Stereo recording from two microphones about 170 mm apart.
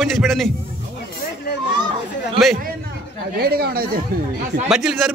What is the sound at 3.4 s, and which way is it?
Speech, 65° right (ahead or behind).